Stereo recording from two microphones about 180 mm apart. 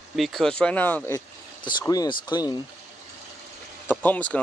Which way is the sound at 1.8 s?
20° left (ahead or behind).